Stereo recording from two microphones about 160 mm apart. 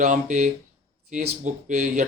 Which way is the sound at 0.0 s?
50° right (ahead or behind).